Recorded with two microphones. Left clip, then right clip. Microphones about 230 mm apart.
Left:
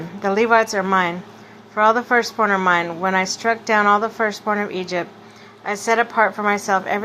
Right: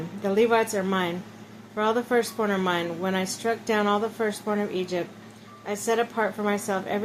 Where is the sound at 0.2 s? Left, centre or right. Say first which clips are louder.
Left 6 dB; centre.